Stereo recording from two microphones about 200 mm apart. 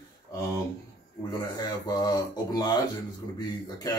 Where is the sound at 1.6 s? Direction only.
20° left (ahead or behind).